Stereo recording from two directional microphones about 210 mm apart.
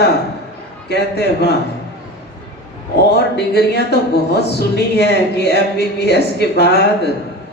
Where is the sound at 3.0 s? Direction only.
50° left (ahead or behind).